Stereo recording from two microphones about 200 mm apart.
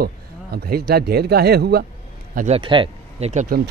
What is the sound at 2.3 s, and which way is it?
Speech, 35° right (ahead or behind).